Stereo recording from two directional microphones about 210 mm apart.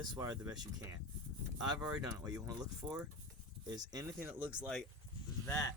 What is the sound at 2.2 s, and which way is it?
Speech, 15° right (ahead or behind).